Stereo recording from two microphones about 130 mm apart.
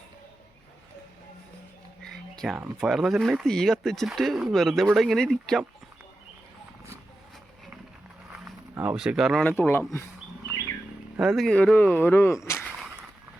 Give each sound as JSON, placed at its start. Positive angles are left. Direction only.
{"t": 2.0, "sound": "a sound", "side_deg": 5}
{"t": 2.7, "sound": "speech", "side_deg": 0}
{"t": 8.7, "sound": "speech", "side_deg": -15}
{"t": 9.4, "sound": "speech", "side_deg": 15}
{"t": 11.2, "sound": "speech", "side_deg": 0}